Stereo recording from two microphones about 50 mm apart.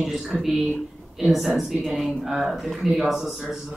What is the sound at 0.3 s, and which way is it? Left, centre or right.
Speech, centre.